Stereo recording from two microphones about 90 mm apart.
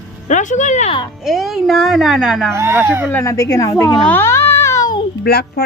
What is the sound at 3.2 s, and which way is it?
Speech, 40° left (ahead or behind).